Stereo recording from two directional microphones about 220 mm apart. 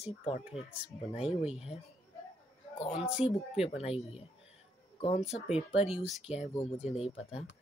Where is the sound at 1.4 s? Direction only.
Centre (ahead or behind).